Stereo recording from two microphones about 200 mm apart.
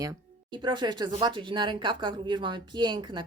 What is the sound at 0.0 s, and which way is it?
Speech, 20° right (ahead or behind).